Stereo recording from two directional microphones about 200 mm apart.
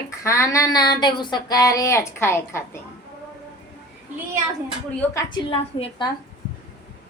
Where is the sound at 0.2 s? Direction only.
15° left (ahead or behind).